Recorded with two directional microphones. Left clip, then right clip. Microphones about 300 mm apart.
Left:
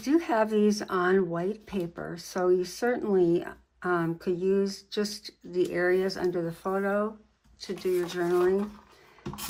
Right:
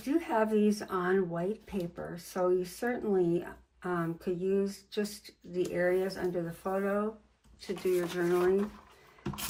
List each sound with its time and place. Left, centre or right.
0.0 s speech: left
7.9 s speech: centre